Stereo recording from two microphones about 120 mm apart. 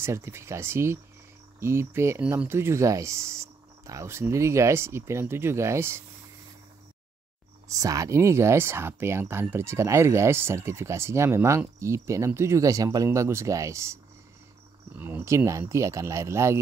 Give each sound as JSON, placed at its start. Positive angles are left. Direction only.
{"t": 0.0, "sound": "speech", "side_deg": -20}
{"t": 7.6, "sound": "speech", "side_deg": -30}
{"t": 15.0, "sound": "speech", "side_deg": -20}